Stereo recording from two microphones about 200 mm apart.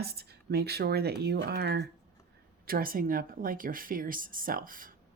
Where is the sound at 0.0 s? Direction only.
50° right (ahead or behind).